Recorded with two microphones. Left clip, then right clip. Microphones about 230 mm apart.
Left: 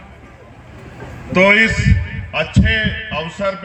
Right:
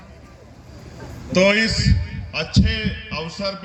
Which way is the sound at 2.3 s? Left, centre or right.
Left.